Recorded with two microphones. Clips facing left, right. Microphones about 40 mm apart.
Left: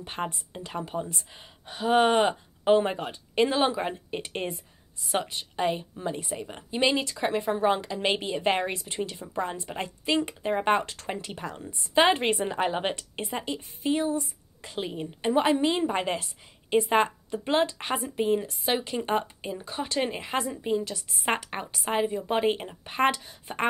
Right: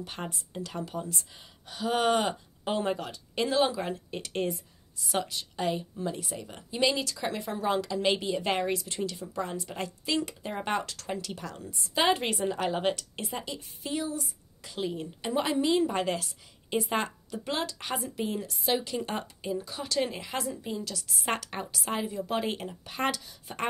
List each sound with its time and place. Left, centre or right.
0.0 s a woman's voice: left